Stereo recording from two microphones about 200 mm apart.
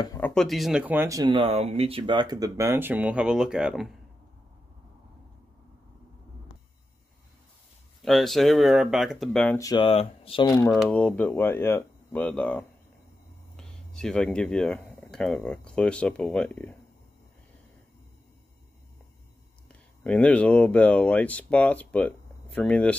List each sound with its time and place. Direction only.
0.2 s speech: 5° left (ahead or behind)
8.0 s speech: centre (ahead or behind)
9.6 s speech: 20° left (ahead or behind)
10.7 s speech: 5° left (ahead or behind)
20.0 s speech: 5° left (ahead or behind)